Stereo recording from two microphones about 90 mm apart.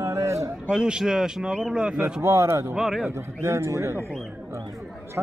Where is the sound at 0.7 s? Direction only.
5° right (ahead or behind).